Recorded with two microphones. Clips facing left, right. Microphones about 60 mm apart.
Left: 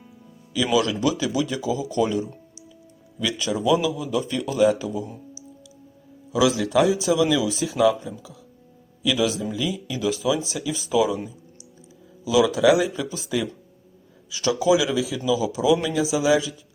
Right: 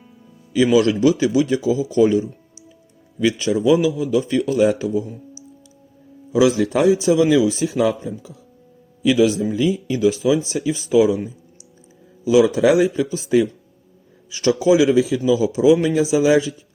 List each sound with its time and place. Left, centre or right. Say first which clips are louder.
0.5 s speech: right 6 dB; right
3.2 s speech: right 7 dB; right
6.3 s speech: right 3 dB; right
12.2 s speech: right 4 dB; right
14.4 s speech: right 5 dB; right